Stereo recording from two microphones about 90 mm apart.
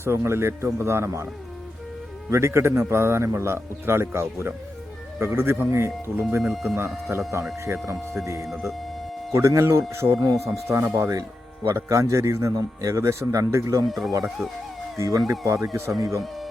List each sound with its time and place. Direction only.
0.0 s a man's voice: 30° right (ahead or behind)
2.3 s a man's voice: 30° right (ahead or behind)
6.4 s speech: centre (ahead or behind)
6.7 s a man's voice: 30° right (ahead or behind)
8.2 s a man's voice: 35° right (ahead or behind)
10.2 s speech: 40° right (ahead or behind)
13.8 s speech: centre (ahead or behind)
14.9 s speech: 35° right (ahead or behind)